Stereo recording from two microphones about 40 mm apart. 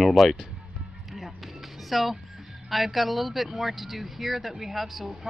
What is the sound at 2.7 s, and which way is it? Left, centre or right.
Speech, centre.